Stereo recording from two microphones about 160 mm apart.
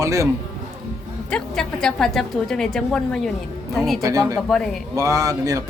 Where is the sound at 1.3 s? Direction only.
5° left (ahead or behind).